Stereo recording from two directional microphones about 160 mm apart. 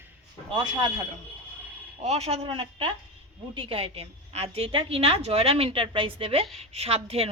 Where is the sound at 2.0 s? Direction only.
45° right (ahead or behind).